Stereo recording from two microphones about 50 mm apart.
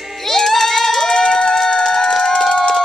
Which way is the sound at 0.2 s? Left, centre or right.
Centre.